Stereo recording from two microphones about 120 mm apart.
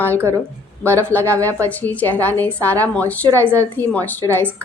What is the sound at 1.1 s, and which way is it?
A woman's voice, 15° left (ahead or behind).